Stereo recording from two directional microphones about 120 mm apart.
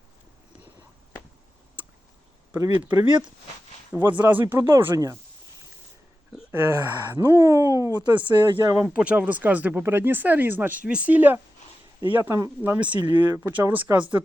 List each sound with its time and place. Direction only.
2.9 s speech: 15° right (ahead or behind)
6.6 s speech: 30° right (ahead or behind)
7.1 s speech: 20° right (ahead or behind)
8.0 s speech: 40° right (ahead or behind)
8.7 s speech: 10° right (ahead or behind)